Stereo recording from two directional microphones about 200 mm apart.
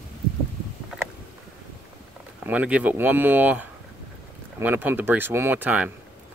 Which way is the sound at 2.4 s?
5° right (ahead or behind).